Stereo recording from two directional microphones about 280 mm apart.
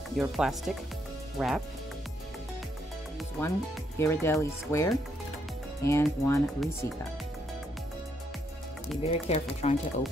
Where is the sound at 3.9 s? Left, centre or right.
Centre.